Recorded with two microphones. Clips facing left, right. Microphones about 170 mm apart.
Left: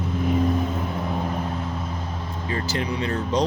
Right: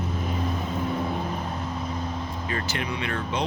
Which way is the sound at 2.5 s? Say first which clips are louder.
Left 5 dB; 30° left (ahead or behind).